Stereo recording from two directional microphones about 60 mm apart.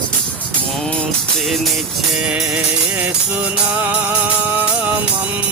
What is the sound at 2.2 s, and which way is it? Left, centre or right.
Music, centre.